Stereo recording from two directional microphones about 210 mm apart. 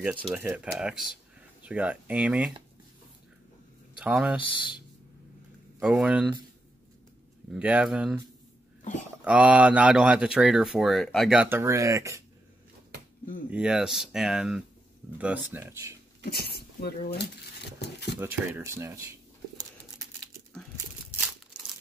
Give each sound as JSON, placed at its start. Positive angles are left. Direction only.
{"t": 0.0, "sound": "speech", "side_deg": -5}
{"t": 3.9, "sound": "speech", "side_deg": -5}
{"t": 5.8, "sound": "speech", "side_deg": -5}
{"t": 7.5, "sound": "speech", "side_deg": -5}
{"t": 9.2, "sound": "speech", "side_deg": -5}
{"t": 13.5, "sound": "speech", "side_deg": -5}
{"t": 16.3, "sound": "speech", "side_deg": 50}
{"t": 18.1, "sound": "speech", "side_deg": -10}